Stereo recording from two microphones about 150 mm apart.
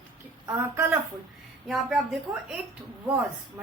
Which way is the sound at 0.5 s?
15° right (ahead or behind).